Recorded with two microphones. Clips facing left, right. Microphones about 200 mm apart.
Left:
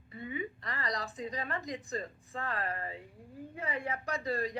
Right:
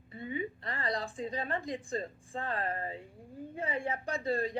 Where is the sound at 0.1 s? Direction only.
30° right (ahead or behind).